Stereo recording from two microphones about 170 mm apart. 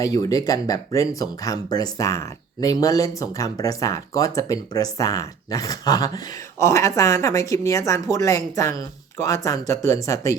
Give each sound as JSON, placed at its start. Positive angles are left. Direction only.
{"t": 0.0, "sound": "speech", "side_deg": 20}